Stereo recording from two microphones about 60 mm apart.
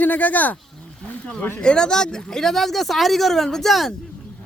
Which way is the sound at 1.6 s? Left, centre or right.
Centre.